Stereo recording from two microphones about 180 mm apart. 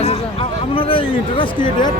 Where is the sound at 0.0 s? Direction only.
30° left (ahead or behind).